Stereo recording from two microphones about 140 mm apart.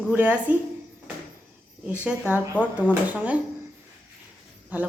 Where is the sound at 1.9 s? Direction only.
10° right (ahead or behind).